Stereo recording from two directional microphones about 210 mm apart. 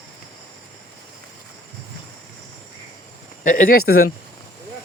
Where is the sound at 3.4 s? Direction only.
40° left (ahead or behind).